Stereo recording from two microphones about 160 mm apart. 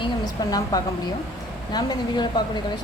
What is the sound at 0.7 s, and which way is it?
Speech, 20° left (ahead or behind).